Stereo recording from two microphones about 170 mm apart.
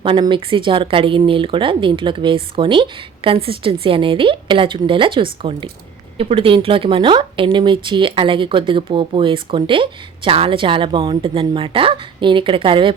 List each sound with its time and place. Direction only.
0.0 s speech: 30° right (ahead or behind)